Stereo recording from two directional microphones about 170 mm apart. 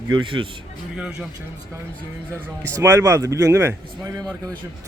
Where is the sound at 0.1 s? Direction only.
30° right (ahead or behind).